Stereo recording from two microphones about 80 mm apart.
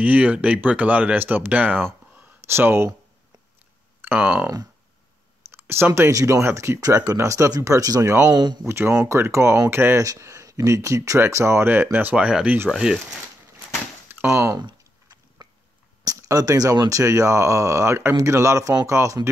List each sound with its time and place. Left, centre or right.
0.0 s speech: centre
2.4 s speech: right
4.0 s a sound: right
5.5 s speech: right
8.3 s speech: right
8.6 s speech: right
10.0 s speech: right
12.3 s speech: centre
14.0 s speech: right
15.4 s a sound: right
16.0 s speech: right
16.9 s speech: right